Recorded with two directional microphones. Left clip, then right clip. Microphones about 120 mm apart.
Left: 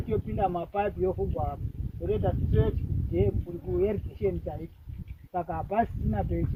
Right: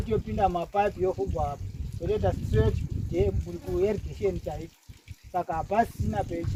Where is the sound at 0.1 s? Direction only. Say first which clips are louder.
Right 3 dB; 25° right (ahead or behind).